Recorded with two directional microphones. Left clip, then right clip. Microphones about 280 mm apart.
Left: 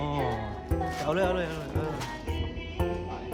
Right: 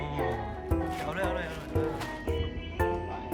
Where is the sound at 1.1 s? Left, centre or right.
Centre.